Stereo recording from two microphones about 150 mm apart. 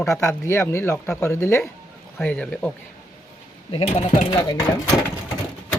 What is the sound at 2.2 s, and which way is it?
Speech, 5° left (ahead or behind).